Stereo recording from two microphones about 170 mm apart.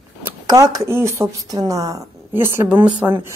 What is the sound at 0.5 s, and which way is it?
A woman's voice, 20° right (ahead or behind).